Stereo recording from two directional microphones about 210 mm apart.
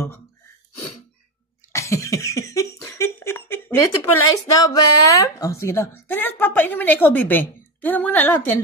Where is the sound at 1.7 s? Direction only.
15° left (ahead or behind).